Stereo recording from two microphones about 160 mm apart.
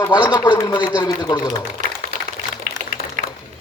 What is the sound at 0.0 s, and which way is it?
A man's voice, 25° left (ahead or behind).